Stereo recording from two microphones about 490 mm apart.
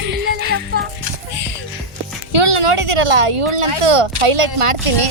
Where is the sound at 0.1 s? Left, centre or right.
Right.